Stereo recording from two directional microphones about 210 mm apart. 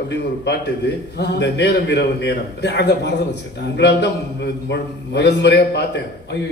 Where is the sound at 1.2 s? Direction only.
50° left (ahead or behind).